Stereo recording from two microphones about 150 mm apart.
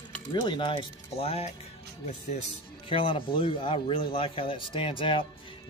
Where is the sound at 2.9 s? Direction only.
35° left (ahead or behind).